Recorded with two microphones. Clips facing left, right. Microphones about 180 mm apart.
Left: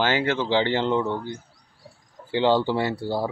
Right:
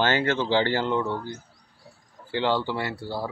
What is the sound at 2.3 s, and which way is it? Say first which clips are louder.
Speech: left 5 dB; 20° left (ahead or behind).